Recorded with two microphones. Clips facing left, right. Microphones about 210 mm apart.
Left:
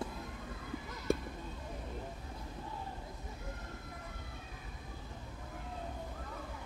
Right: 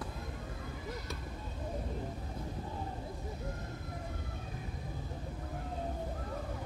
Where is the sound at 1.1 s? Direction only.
50° left (ahead or behind).